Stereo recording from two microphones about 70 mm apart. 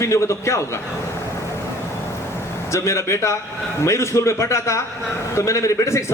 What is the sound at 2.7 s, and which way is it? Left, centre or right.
A man's voice, left.